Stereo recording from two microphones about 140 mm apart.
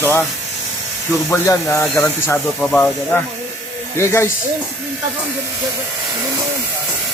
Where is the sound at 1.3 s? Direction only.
20° left (ahead or behind).